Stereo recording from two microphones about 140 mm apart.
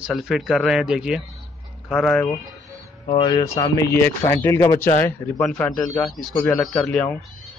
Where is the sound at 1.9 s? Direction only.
5° left (ahead or behind).